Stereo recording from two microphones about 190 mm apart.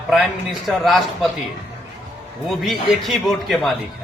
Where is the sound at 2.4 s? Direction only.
Centre (ahead or behind).